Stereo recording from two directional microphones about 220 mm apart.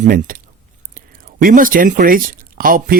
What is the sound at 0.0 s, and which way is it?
Speech, 40° right (ahead or behind).